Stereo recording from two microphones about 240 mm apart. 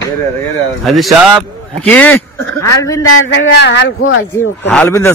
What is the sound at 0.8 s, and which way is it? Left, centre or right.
Speech, centre.